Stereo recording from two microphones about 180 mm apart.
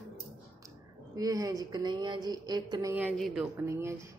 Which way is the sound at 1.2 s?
20° right (ahead or behind).